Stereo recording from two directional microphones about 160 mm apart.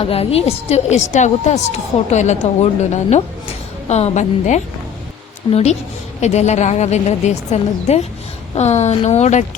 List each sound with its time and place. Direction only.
0.0 s a woman's voice: 40° left (ahead or behind)